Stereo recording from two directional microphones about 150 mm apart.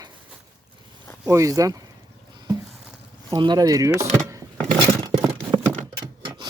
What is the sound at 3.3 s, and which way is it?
Speech, 30° right (ahead or behind).